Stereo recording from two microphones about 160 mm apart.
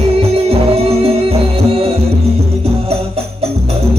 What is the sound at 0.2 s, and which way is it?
Music, 40° right (ahead or behind).